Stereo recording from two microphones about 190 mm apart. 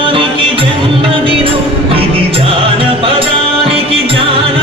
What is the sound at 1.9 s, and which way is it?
Music, 30° right (ahead or behind).